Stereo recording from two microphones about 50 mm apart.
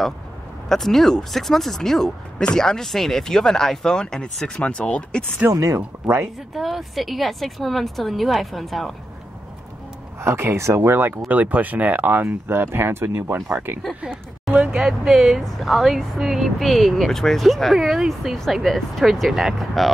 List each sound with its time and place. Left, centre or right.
0.7 s speech: centre; by 5.2 s left
5.4 s speech: right
6.5 s a woman's voice: centre
10.2 s speech: right
10.9 s speech: right
11.2 s speech: right
14.5 s vehicle: right
14.8 s a woman's voice: centre